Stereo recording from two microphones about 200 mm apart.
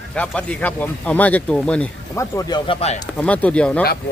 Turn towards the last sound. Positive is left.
turn(degrees=5)  # may be behind; listen again after turning